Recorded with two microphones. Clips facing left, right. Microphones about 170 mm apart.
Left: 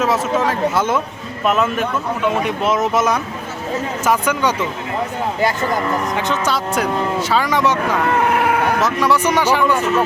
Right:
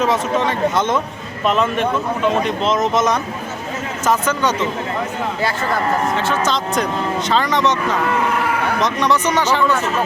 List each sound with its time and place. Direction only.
0.0 s speech: 5° left (ahead or behind)
8.3 s livestock: 60° left (ahead or behind)
8.6 s speech: 5° left (ahead or behind)